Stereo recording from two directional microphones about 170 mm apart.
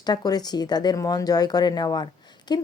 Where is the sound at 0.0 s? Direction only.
25° left (ahead or behind).